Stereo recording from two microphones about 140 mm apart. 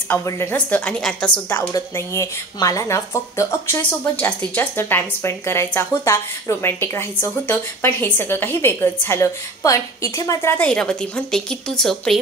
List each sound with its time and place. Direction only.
0.1 s speech: 15° left (ahead or behind)
1.7 s speech: 25° left (ahead or behind)
10.6 s a woman's voice: 5° left (ahead or behind)